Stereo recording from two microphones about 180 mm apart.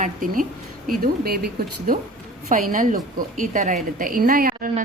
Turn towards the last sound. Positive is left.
turn(degrees=-55)  # may be behind; listen again after turning